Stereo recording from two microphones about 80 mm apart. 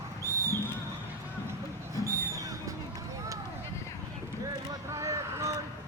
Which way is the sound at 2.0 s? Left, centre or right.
Right.